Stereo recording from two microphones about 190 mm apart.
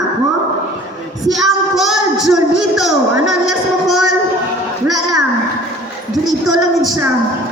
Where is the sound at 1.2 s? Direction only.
Centre (ahead or behind).